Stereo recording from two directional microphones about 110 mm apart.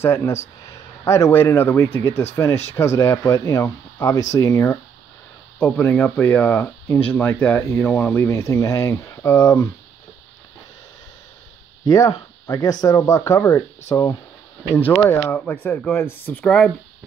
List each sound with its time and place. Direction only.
0.0 s speech: 25° left (ahead or behind)
5.6 s speech: 15° left (ahead or behind)
11.8 s speech: 35° left (ahead or behind); by 16.7 s 10° left (ahead or behind)